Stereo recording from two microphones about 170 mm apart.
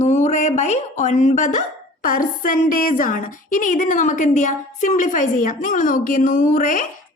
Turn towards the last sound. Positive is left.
turn(degrees=50)  # may be behind; listen again after turning